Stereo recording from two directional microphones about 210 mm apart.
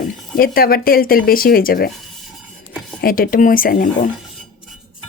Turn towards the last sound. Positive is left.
turn(degrees=40)  # may be behind; listen again after turning